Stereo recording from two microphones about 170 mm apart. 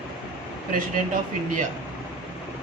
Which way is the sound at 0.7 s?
50° right (ahead or behind).